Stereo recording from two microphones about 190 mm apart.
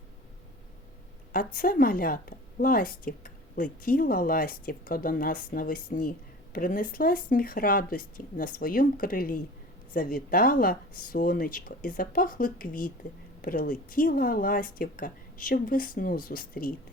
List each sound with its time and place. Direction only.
1.5 s a woman's voice: 50° left (ahead or behind)